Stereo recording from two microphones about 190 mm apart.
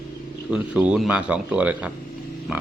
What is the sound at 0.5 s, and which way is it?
Speech, 5° right (ahead or behind).